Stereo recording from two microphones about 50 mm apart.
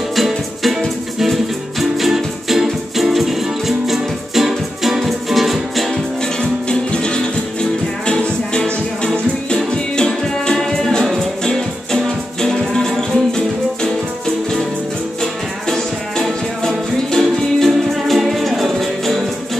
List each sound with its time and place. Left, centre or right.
0.1 s music: centre
6.2 s music: centre
15.7 s music: centre